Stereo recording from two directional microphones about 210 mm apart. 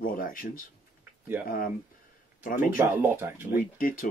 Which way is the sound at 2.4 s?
40° left (ahead or behind).